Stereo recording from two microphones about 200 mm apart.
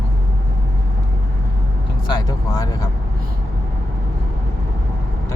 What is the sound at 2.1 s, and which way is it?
Vehicle, 20° left (ahead or behind).